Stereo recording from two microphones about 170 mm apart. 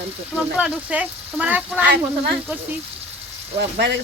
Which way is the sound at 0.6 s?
5° right (ahead or behind).